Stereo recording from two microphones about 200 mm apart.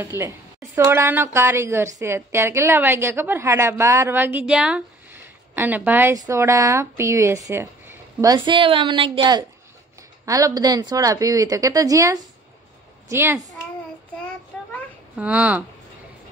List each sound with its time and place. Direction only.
0.2 s a woman's voice: 15° right (ahead or behind)
15.1 s a woman's voice: 5° right (ahead or behind)